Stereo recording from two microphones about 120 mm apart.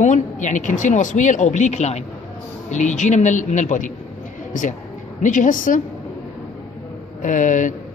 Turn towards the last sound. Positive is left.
turn(degrees=90)